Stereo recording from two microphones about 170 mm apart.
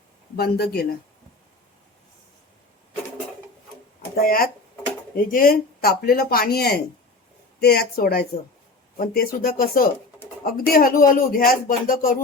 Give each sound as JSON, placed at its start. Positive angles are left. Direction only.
{"t": 0.3, "sound": "speech", "side_deg": 65}
{"t": 4.1, "sound": "speech", "side_deg": 60}